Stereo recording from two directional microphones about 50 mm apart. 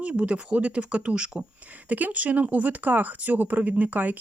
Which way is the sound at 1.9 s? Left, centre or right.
Right.